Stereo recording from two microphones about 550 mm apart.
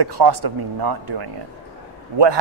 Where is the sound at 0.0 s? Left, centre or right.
Right.